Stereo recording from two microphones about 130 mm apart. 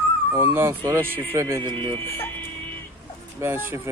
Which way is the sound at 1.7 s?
35° right (ahead or behind).